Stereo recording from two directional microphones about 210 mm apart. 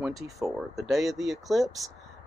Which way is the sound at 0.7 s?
Centre (ahead or behind).